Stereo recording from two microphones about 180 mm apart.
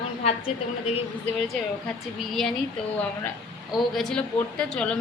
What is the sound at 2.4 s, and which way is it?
Speech, centre (ahead or behind).